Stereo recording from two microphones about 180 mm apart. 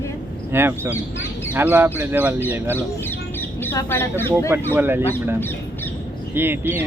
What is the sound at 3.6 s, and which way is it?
Speech, 10° left (ahead or behind).